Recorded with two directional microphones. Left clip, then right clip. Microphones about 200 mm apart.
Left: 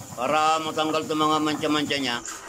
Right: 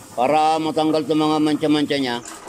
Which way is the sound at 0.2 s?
20° right (ahead or behind).